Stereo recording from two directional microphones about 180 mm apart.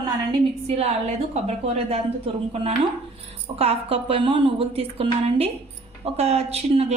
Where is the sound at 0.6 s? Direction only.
35° right (ahead or behind).